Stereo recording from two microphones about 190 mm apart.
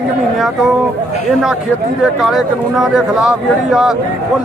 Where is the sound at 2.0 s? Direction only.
Centre (ahead or behind).